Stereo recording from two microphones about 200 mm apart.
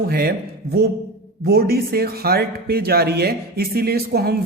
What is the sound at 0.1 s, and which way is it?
Speech, 50° right (ahead or behind).